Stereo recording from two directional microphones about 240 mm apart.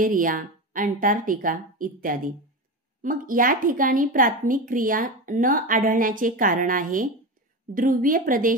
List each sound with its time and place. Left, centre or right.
0.0 s a woman's voice: right